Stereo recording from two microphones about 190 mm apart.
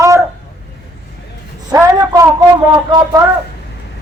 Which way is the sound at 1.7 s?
15° right (ahead or behind).